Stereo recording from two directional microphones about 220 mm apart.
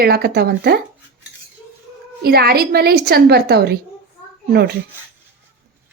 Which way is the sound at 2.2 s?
45° right (ahead or behind).